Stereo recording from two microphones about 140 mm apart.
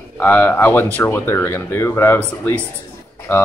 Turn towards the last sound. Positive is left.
turn(degrees=15)  # may be behind; listen again after turning